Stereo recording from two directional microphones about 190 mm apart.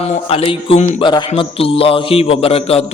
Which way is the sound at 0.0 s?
30° left (ahead or behind).